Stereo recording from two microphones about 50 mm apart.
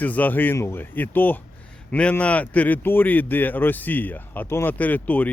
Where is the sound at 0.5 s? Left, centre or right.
Left.